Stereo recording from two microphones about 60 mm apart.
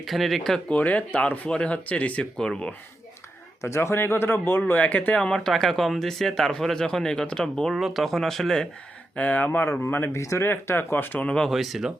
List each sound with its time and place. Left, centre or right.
0.0 s speech: centre
0.7 s speech: left
3.6 s a man's voice: left
4.6 s speech: left
5.4 s speech: centre
7.7 s speech: centre
9.1 s speech: left
10.2 s speech: left
10.4 s speech: left
11.4 s speech: centre